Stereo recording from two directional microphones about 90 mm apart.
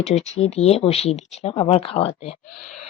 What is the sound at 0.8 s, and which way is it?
Speech, 90° left.